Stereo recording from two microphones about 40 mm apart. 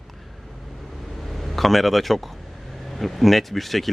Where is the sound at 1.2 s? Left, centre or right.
Centre.